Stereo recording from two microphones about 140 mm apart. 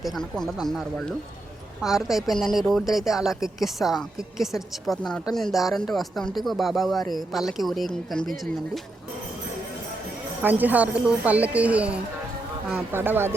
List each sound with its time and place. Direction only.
0.0 s speech: centre (ahead or behind)
10.4 s speech: 10° right (ahead or behind)